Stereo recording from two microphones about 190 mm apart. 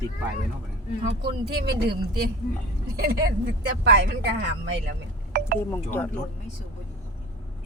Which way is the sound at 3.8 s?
65° right (ahead or behind).